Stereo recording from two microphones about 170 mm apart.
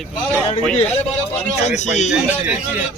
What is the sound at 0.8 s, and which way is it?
A man's voice, 40° left (ahead or behind).